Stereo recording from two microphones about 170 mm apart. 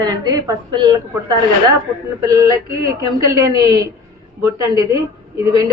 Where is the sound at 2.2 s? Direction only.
20° right (ahead or behind).